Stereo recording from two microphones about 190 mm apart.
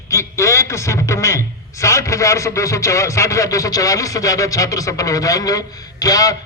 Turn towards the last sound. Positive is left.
turn(degrees=20)  # may be behind; listen again after turning